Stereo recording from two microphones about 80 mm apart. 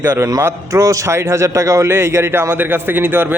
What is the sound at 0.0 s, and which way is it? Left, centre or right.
A man's voice, right.